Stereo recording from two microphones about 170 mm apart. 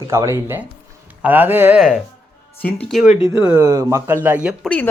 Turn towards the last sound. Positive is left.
turn(degrees=5)  # may be behind; listen again after turning